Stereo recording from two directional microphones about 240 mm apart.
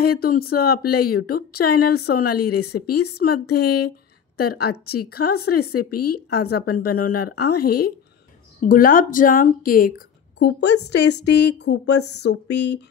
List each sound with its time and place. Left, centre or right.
0.0 s speech: left
3.5 s speech: left
4.4 s speech: left
5.7 s speech: left
6.3 s speech: left
8.5 s speech: left